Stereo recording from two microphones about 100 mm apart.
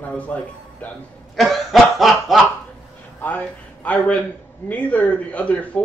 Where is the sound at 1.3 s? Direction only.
Centre (ahead or behind).